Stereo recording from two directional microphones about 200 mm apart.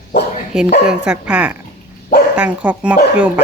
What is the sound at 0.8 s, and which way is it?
Speech, 5° right (ahead or behind).